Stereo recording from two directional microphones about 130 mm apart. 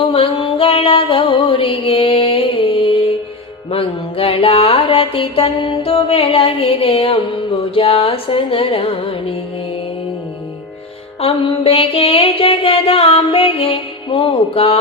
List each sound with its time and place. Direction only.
0.0 s music: 45° left (ahead or behind)
11.2 s music: 45° left (ahead or behind)